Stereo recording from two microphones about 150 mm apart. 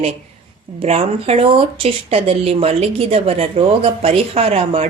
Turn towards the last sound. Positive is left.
turn(degrees=-40)  # may be behind; listen again after turning